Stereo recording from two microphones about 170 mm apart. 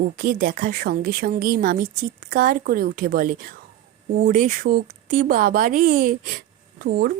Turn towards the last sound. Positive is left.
turn(degrees=-65)  # may be behind; listen again after turning